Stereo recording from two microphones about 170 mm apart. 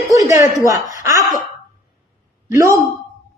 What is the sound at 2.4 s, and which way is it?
Speech, 20° right (ahead or behind).